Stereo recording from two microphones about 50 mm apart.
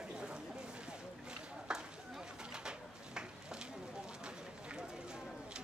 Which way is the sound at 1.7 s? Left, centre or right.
Centre.